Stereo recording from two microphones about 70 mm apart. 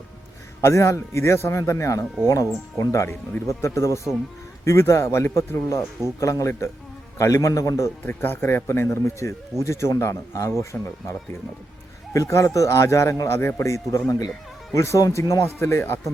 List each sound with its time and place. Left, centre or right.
0.6 s speech: left
8.0 s a man's voice: left
12.1 s a man's voice: left